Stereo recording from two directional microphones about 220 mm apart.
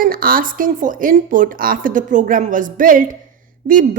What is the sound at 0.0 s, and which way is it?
A woman's voice, 40° right (ahead or behind).